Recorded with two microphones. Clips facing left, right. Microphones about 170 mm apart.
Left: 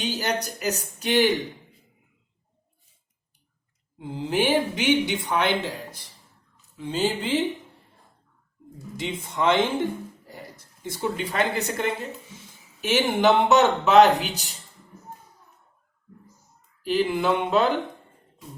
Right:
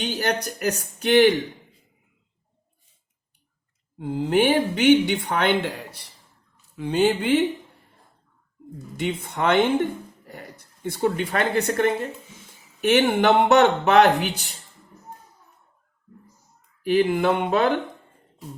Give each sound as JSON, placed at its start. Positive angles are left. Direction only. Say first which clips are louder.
{"t": 0.0, "sound": "speech", "louder": "right 2 dB", "side_deg": -55}
{"t": 3.9, "sound": "speech", "louder": "right 5 dB", "side_deg": -50}
{"t": 9.0, "sound": "speech", "louder": "right 2 dB", "side_deg": -60}
{"t": 16.8, "sound": "speech", "louder": "right 3 dB", "side_deg": -50}